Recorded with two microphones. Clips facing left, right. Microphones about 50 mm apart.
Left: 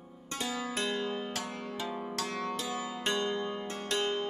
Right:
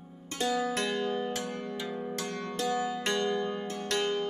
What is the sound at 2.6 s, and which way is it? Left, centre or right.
Music, centre.